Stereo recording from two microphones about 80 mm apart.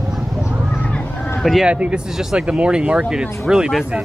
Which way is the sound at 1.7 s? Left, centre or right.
Centre.